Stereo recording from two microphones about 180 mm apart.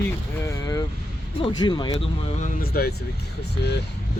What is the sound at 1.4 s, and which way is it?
Speech, 25° left (ahead or behind).